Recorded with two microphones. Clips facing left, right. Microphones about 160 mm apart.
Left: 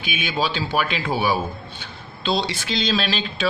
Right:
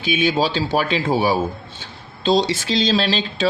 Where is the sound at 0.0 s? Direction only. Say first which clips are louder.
Right 6 dB; 35° right (ahead or behind).